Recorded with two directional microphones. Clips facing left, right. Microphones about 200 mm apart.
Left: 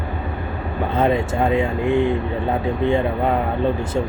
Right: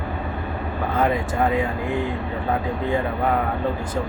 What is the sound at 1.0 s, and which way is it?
Speech, 25° left (ahead or behind).